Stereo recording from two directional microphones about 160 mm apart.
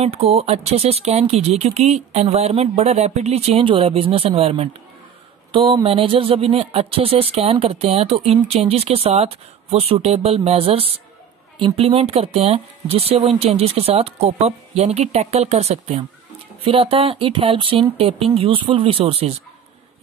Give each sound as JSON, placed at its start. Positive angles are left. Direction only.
{"t": 0.0, "sound": "speech", "side_deg": -40}